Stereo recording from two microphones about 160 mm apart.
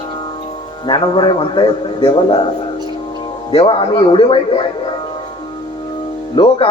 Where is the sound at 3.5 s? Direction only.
30° left (ahead or behind).